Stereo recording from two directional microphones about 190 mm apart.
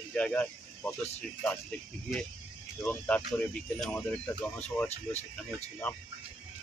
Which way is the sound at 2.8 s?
5° left (ahead or behind).